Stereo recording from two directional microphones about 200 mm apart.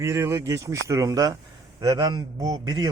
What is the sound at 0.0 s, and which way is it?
A man's voice, 15° right (ahead or behind).